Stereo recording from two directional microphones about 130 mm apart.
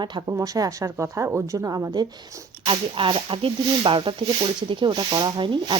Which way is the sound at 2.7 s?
40° right (ahead or behind).